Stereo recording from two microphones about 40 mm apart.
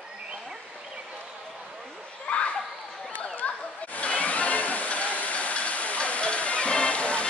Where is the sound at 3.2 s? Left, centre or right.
Left.